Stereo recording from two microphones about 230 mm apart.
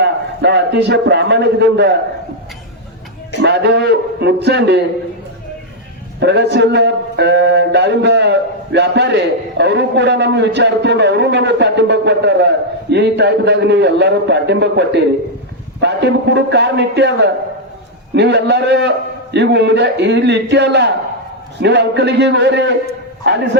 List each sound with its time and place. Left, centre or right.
0.0 s a man's voice: right
3.4 s speech: right
6.1 s speech: right